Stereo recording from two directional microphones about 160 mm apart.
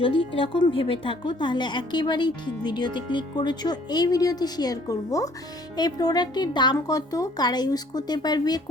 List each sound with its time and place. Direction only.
0.0 s a woman's voice: 35° left (ahead or behind)